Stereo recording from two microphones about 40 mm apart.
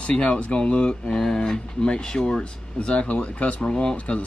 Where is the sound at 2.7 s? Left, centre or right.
Left.